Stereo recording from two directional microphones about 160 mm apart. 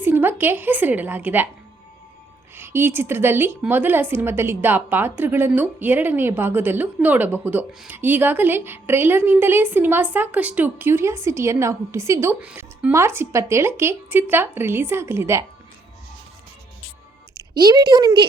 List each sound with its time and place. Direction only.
0.0 s a woman's voice: 15° right (ahead or behind)
2.6 s a woman's voice: 15° right (ahead or behind)
17.3 s a woman's voice: 25° right (ahead or behind)